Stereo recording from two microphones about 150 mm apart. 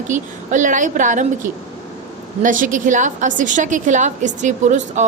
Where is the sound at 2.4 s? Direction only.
60° right (ahead or behind).